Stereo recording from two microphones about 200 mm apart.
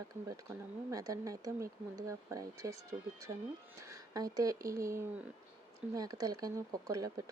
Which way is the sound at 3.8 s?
15° right (ahead or behind).